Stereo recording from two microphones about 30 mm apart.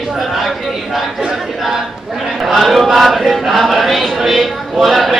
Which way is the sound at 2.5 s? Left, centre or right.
Centre.